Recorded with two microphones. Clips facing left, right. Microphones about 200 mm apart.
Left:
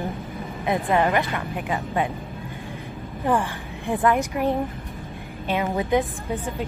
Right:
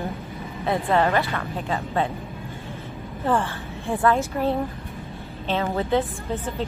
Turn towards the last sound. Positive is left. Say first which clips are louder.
# even
turn(degrees=15)  # may be behind; listen again after turning